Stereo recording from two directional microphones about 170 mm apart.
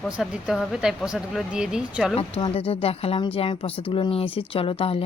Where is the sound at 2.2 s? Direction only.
35° left (ahead or behind).